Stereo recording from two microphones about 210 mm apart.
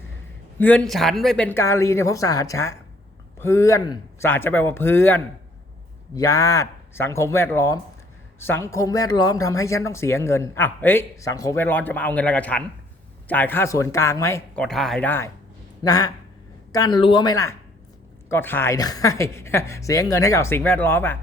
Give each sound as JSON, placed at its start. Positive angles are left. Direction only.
{"t": 0.6, "sound": "speech", "side_deg": 5}
{"t": 14.6, "sound": "speech", "side_deg": 0}